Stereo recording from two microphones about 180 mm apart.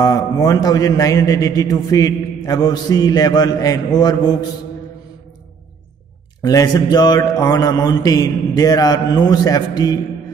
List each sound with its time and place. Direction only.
0.0 s a man's voice: 20° left (ahead or behind)
6.4 s a man's voice: 20° left (ahead or behind)